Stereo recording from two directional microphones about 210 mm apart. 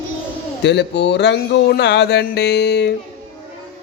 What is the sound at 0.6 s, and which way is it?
Speech, 55° left (ahead or behind).